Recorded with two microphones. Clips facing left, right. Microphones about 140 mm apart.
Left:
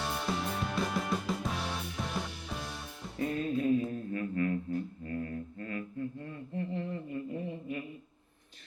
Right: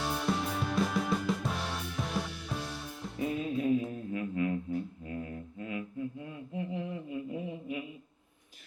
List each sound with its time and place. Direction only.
0.0 s music: centre (ahead or behind)